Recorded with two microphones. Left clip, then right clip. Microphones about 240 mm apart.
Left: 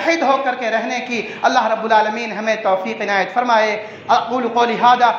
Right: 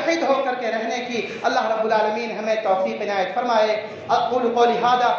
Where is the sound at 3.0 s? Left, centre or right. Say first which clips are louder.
Left 5 dB; left.